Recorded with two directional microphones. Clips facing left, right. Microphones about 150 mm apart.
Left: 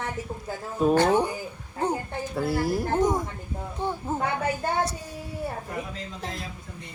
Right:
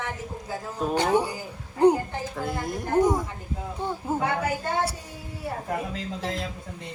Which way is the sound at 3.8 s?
10° right (ahead or behind).